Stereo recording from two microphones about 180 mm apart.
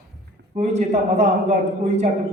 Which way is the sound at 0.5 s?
40° right (ahead or behind).